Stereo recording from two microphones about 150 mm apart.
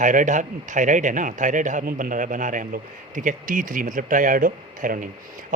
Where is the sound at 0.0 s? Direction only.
60° right (ahead or behind).